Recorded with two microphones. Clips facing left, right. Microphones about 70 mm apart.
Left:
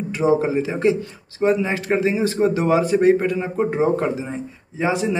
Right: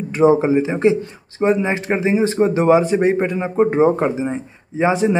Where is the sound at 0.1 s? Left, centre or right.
Right.